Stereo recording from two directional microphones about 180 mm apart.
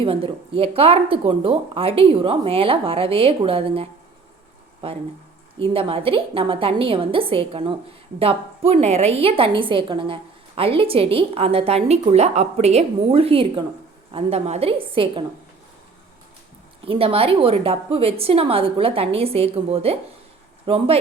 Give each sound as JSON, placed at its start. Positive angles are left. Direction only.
{"t": 0.0, "sound": "a woman's voice", "side_deg": -30}
{"t": 5.7, "sound": "a woman's voice", "side_deg": -30}
{"t": 16.8, "sound": "a woman's voice", "side_deg": -30}